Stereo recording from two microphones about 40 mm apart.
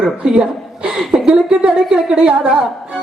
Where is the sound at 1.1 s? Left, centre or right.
Right.